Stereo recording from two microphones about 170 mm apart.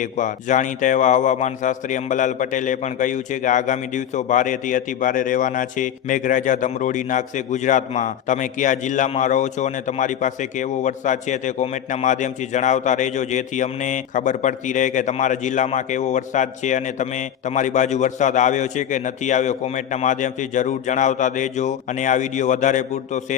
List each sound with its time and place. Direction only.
0.0 s a man's voice: 50° left (ahead or behind)